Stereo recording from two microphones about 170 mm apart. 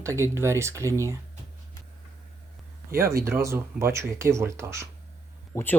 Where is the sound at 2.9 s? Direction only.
60° right (ahead or behind).